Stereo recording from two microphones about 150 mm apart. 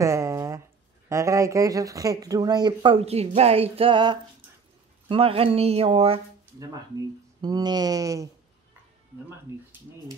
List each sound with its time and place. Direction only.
0.0 s a sound: 20° right (ahead or behind)
1.0 s speech: 20° right (ahead or behind); by 6.2 s 40° right (ahead or behind)
7.4 s speech: 25° right (ahead or behind)
9.5 s speech: 15° right (ahead or behind)